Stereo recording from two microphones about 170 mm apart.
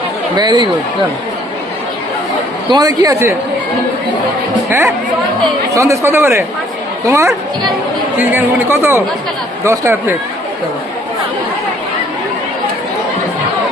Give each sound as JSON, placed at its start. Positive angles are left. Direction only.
{"t": 0.3, "sound": "speech", "side_deg": -25}
{"t": 2.6, "sound": "speech", "side_deg": -25}
{"t": 5.7, "sound": "a woman's voice", "side_deg": -15}